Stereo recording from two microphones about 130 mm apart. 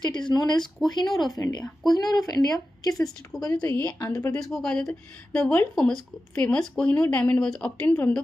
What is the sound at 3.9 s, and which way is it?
A woman's voice, 15° left (ahead or behind).